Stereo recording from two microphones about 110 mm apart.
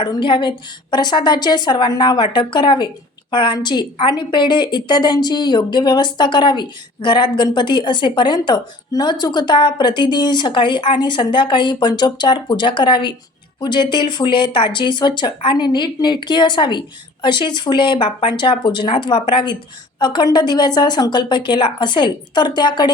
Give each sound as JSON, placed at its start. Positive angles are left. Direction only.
{"t": 0.2, "sound": "a woman's voice", "side_deg": 45}